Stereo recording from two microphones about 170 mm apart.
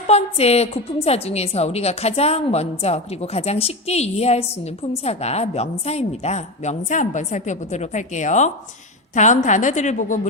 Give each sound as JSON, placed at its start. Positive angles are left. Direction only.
{"t": 0.1, "sound": "a woman's voice", "side_deg": 40}